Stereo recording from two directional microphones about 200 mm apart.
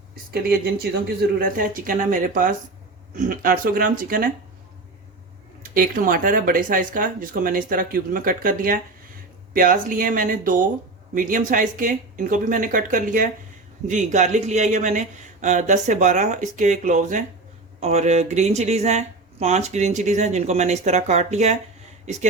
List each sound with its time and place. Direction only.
0.3 s speech: 55° right (ahead or behind)
5.7 s speech: 45° right (ahead or behind)